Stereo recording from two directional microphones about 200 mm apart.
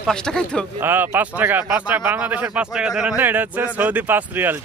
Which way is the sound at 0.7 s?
10° right (ahead or behind).